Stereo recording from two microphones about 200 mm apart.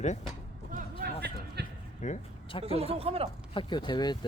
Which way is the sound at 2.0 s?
30° left (ahead or behind).